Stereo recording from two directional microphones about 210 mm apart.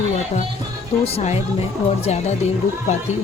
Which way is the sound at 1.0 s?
30° left (ahead or behind).